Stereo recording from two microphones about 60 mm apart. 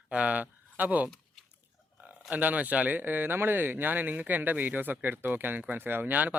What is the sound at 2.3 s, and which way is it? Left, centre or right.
A man's voice, right.